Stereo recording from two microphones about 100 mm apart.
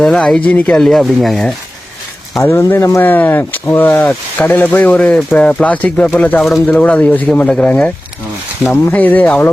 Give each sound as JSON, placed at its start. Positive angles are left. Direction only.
{"t": 0.0, "sound": "speech", "side_deg": 5}
{"t": 2.4, "sound": "speech", "side_deg": 25}
{"t": 7.3, "sound": "speech", "side_deg": 5}